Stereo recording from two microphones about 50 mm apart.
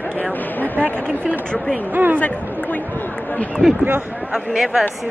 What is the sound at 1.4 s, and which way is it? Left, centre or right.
Speech, centre.